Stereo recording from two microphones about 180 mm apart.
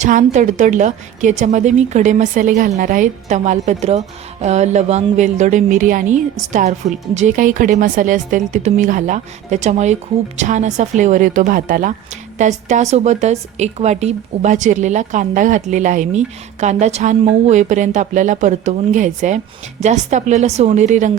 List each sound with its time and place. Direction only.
0.0 s speech: 45° right (ahead or behind)